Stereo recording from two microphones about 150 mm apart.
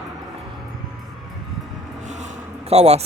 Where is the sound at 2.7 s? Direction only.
45° right (ahead or behind).